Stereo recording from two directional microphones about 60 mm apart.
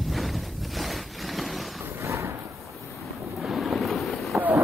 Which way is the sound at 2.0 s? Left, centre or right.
Right.